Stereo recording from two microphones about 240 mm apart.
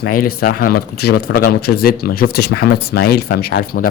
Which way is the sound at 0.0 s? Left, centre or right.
Left.